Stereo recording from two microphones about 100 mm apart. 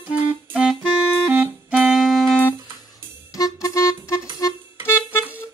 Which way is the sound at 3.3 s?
35° left (ahead or behind).